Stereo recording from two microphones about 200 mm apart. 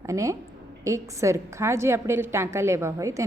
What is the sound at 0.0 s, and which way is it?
A woman's voice, 15° right (ahead or behind).